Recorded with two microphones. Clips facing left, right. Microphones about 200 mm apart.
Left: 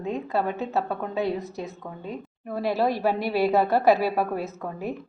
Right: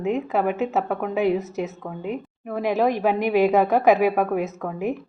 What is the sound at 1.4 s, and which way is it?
Speech, 85° right.